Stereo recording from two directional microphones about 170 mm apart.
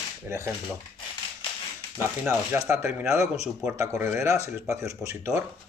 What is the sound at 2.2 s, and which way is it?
Speech, 10° right (ahead or behind).